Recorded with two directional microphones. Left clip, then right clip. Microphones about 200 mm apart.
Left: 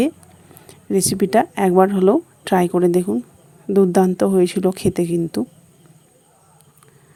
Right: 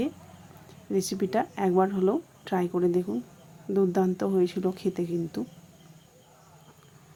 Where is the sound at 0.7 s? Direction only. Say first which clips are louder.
Left 9 dB; 40° left (ahead or behind).